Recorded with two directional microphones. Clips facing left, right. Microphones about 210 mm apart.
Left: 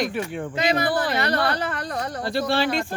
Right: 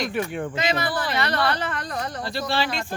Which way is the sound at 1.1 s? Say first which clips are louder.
Left 1 dB; 40° left (ahead or behind).